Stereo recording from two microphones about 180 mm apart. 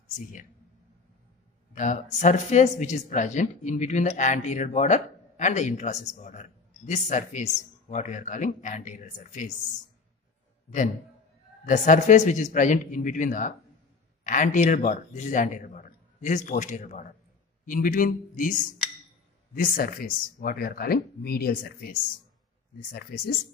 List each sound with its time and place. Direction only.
1.8 s speech: 45° left (ahead or behind)
11.6 s speech: 45° left (ahead or behind)